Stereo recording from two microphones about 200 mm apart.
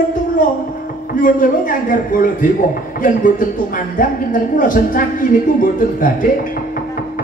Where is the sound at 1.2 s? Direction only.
40° left (ahead or behind).